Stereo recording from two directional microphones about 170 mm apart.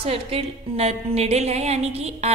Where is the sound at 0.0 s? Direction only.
35° right (ahead or behind).